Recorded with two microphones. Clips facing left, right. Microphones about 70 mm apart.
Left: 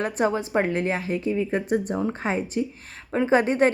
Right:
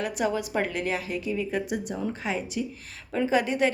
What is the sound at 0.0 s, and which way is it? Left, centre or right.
A woman's voice, left.